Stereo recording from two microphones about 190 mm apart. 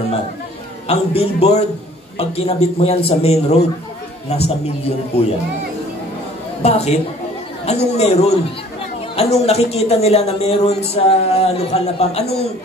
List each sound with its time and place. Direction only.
0.8 s speech: 35° left (ahead or behind)
6.6 s speech: 35° left (ahead or behind)